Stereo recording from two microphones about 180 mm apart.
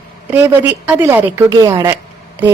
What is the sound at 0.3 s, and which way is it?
A woman's voice, 10° right (ahead or behind).